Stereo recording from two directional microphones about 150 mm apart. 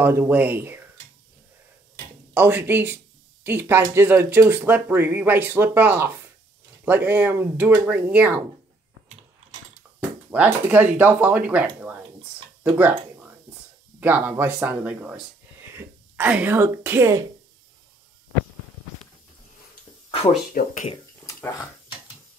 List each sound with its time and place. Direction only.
0.0 s speech: 15° right (ahead or behind)
2.3 s speech: 10° right (ahead or behind)
9.9 s a sound: 10° right (ahead or behind)
13.9 s speech: 10° right (ahead or behind)
20.5 s speech: 60° left (ahead or behind)